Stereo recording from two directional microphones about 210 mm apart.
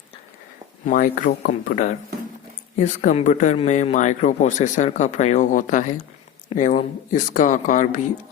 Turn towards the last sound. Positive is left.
turn(degrees=35)  # may be behind; listen again after turning